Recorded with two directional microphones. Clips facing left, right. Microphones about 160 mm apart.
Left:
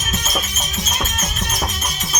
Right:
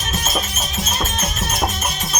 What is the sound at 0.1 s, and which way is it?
Music, 30° right (ahead or behind).